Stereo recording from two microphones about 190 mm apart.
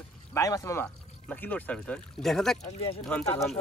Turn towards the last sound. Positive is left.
turn(degrees=0)  # may be behind; listen again after turning